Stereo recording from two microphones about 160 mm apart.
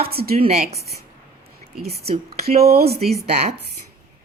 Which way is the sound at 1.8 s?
75° right (ahead or behind).